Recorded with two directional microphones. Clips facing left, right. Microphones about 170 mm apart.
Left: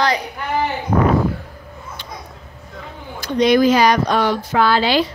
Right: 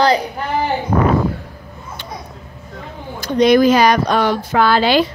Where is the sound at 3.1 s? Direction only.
50° right (ahead or behind).